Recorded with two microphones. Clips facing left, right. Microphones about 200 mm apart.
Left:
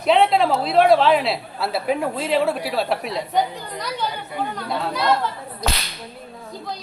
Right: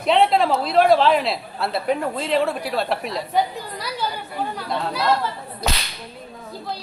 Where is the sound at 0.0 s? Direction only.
Centre (ahead or behind).